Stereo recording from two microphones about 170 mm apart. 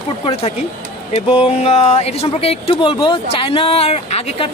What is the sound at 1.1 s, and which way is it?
Speech, 35° left (ahead or behind).